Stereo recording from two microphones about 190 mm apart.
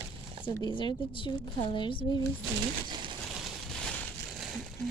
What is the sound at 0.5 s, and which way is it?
Speech, 25° left (ahead or behind).